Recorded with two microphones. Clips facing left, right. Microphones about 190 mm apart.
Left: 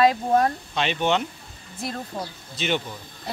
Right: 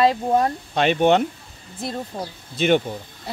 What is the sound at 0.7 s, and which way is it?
Speech, 50° right (ahead or behind).